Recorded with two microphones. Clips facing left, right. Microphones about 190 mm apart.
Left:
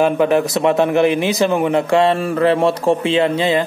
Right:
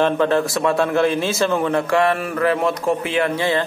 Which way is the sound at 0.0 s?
15° left (ahead or behind).